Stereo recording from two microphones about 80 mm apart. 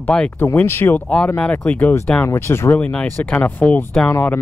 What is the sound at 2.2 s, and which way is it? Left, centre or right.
Speech, left.